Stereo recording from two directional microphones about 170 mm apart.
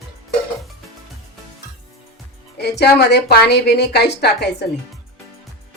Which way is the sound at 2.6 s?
75° left (ahead or behind).